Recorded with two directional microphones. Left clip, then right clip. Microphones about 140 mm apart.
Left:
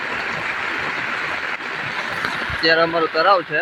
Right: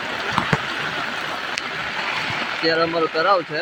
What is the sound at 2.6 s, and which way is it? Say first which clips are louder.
Speech: left 4 dB; 15° left (ahead or behind).